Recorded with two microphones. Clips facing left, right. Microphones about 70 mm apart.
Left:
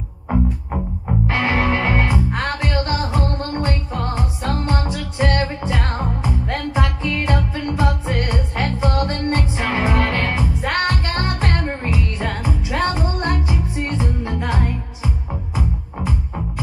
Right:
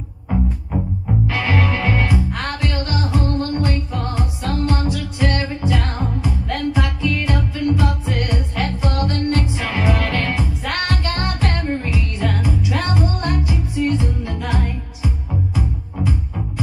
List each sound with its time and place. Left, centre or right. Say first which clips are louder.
1.2 s music: left 2 dB; left